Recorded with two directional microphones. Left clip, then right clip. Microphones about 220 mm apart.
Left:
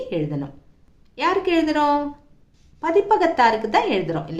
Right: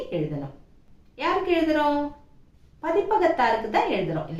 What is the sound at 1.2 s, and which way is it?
Speech, 50° left (ahead or behind).